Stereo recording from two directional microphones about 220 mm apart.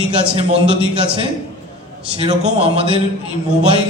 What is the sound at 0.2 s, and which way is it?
Speech, 25° right (ahead or behind).